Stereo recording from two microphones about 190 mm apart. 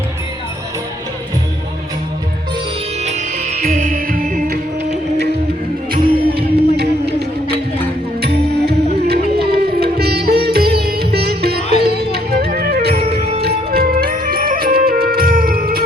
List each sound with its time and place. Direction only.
3.0 s music: 40° right (ahead or behind)
5.9 s music: 55° right (ahead or behind)